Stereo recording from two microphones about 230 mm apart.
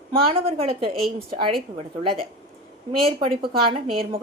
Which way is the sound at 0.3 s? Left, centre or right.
Right.